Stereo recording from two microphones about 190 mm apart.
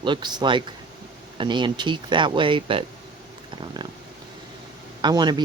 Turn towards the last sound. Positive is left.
turn(degrees=-20)  # may be behind; listen again after turning